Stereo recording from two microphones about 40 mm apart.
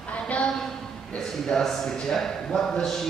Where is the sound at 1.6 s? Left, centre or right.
Centre.